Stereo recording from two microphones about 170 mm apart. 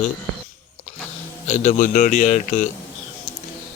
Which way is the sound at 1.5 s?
50° left (ahead or behind).